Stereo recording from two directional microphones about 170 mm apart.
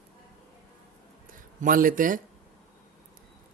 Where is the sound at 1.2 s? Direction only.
55° right (ahead or behind).